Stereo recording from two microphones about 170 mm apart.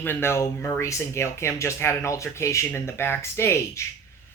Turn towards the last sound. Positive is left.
turn(degrees=15)  # may be behind; listen again after turning